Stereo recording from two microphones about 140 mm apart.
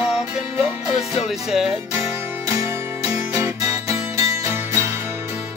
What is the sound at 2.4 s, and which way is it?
Music, 20° right (ahead or behind).